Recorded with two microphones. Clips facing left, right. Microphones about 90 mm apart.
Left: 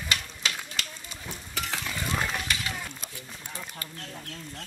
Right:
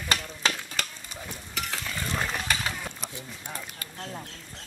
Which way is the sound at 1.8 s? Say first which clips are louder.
Left 1 dB; 5° left (ahead or behind).